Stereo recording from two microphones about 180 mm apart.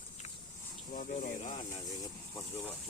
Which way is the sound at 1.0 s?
45° left (ahead or behind).